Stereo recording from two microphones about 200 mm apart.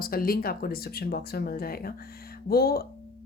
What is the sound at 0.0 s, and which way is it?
A woman's voice, 45° left (ahead or behind).